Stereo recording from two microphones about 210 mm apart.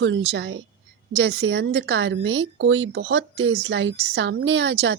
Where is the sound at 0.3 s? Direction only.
60° right (ahead or behind).